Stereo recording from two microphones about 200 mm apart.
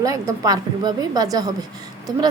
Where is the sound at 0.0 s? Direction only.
15° right (ahead or behind).